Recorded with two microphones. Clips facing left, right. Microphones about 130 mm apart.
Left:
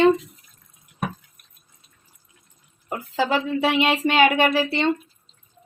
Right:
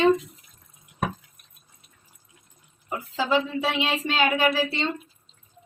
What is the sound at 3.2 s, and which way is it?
Speech, 65° left (ahead or behind).